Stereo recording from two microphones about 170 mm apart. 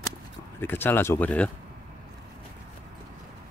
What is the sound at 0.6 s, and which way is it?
Speech, 10° left (ahead or behind).